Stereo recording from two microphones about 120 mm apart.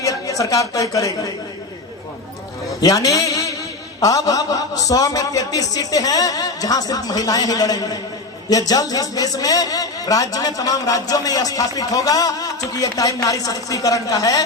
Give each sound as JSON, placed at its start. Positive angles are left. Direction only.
{"t": 0.0, "sound": "speech", "side_deg": 30}
{"t": 2.8, "sound": "a man's voice", "side_deg": 30}